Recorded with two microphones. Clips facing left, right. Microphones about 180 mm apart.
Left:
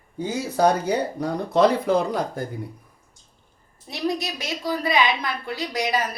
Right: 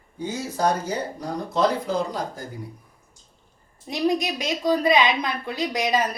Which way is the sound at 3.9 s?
15° right (ahead or behind).